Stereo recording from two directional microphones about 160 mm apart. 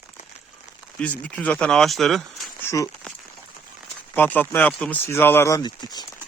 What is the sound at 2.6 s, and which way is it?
Speech, 20° left (ahead or behind).